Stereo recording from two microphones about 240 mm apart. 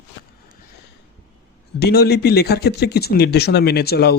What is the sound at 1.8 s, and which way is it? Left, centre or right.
Speech, left.